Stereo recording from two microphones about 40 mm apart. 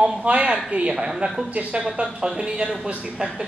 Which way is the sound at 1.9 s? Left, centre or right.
Right.